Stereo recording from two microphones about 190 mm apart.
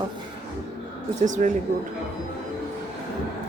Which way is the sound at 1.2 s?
40° right (ahead or behind).